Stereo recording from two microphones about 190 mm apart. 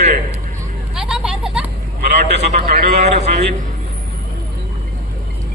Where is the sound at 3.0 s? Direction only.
35° right (ahead or behind).